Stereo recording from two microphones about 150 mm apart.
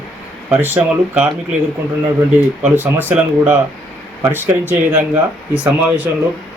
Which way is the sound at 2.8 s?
10° right (ahead or behind).